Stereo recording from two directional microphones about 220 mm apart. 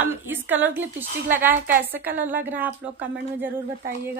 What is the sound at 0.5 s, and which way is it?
A woman's voice, 10° right (ahead or behind).